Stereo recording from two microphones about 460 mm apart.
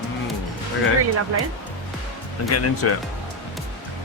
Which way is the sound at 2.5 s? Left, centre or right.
Left.